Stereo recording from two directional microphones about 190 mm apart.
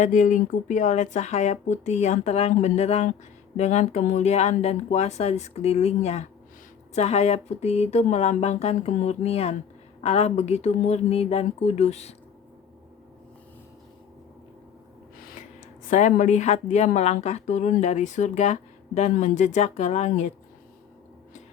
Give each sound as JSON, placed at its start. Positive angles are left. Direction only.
{"t": 0.0, "sound": "a woman's voice", "side_deg": 40}
{"t": 15.9, "sound": "a woman's voice", "side_deg": 40}